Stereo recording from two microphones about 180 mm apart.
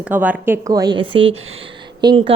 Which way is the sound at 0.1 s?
10° right (ahead or behind).